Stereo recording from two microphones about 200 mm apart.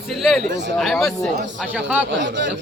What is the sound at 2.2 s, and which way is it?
Speech, 65° right (ahead or behind).